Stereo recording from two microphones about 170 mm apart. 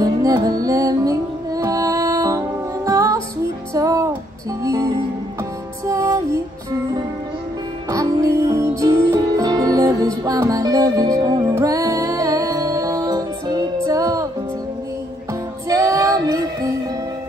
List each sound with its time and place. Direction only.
0.0 s music: 20° right (ahead or behind)
7.9 s music: 20° right (ahead or behind)
15.7 s female singing: 20° right (ahead or behind)